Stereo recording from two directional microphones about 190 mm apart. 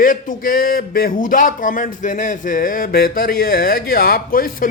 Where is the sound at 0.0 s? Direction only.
45° left (ahead or behind).